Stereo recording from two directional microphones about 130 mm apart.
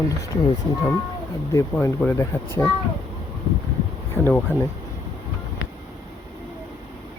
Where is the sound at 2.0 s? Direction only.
15° left (ahead or behind).